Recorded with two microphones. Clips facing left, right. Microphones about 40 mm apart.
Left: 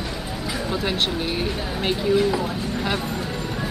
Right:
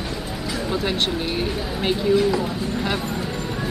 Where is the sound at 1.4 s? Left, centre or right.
Centre.